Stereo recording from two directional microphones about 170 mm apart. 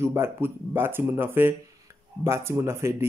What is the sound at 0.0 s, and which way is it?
Speech, 15° right (ahead or behind).